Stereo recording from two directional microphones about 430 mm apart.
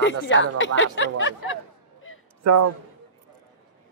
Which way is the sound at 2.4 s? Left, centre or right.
Right.